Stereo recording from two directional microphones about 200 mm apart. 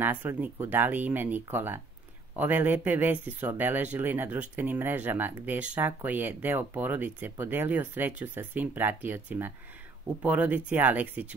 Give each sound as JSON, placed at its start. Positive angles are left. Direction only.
{"t": 0.0, "sound": "speech", "side_deg": -10}